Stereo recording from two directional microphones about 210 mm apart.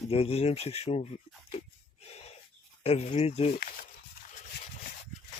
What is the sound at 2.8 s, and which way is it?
Speech, 30° left (ahead or behind).